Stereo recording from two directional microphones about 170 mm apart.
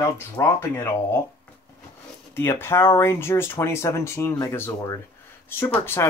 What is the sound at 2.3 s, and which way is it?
Speech, 15° left (ahead or behind).